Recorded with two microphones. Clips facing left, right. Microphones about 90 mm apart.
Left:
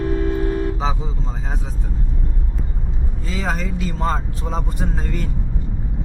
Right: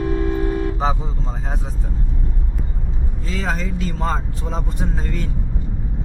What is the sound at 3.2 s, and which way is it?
Speech, centre (ahead or behind).